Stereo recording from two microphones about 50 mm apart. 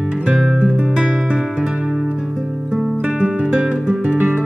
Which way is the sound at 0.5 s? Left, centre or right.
Right.